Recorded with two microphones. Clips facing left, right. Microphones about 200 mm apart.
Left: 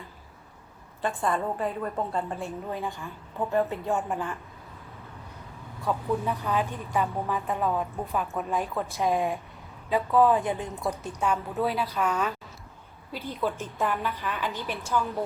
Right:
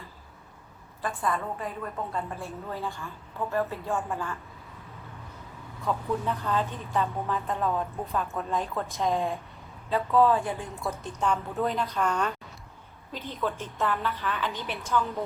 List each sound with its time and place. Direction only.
1.0 s a woman's voice: 30° left (ahead or behind)
2.4 s a woman's voice: 15° left (ahead or behind)
5.8 s a woman's voice: 10° left (ahead or behind)
11.0 s a woman's voice: 10° left (ahead or behind)